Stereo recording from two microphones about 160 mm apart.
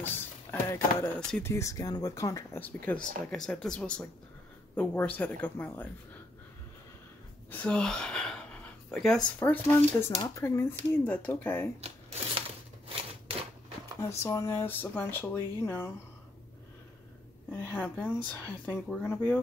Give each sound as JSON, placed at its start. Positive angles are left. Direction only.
{"t": 0.0, "sound": "a sound", "side_deg": 10}
{"t": 1.5, "sound": "speech", "side_deg": 20}
{"t": 7.6, "sound": "speech", "side_deg": 5}
{"t": 11.8, "sound": "a sound", "side_deg": -40}
{"t": 14.0, "sound": "speech", "side_deg": 20}
{"t": 17.5, "sound": "speech", "side_deg": 10}